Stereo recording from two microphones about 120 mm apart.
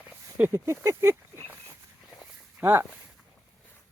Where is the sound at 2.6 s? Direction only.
20° right (ahead or behind).